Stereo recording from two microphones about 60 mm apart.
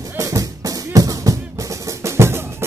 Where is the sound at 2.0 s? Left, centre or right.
Right.